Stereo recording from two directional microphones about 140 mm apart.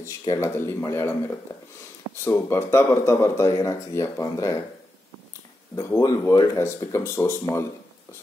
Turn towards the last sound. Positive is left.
turn(degrees=20)  # may be behind; listen again after turning